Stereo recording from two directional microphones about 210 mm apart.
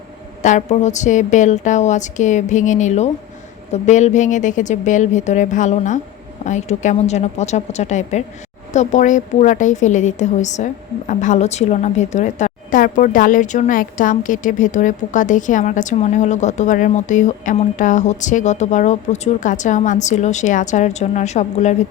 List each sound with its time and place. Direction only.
0.4 s a woman's voice: 35° left (ahead or behind)